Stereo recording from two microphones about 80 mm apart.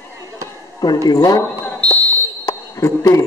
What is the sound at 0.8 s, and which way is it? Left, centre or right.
Speech, left.